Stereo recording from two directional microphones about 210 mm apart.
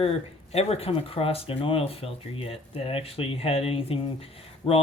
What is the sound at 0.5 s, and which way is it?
Speech, 30° left (ahead or behind).